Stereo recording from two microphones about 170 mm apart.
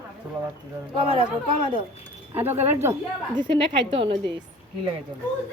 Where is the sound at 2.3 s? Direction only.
10° right (ahead or behind).